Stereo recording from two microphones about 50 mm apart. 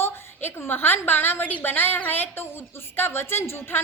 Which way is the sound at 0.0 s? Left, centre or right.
Left.